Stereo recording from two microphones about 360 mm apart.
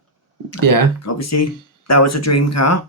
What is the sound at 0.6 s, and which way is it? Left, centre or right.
Speech, right.